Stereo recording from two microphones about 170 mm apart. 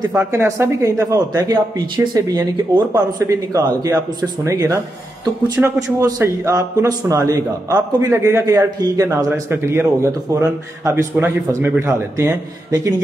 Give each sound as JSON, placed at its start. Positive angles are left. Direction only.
{"t": 0.1, "sound": "a man's voice", "side_deg": -15}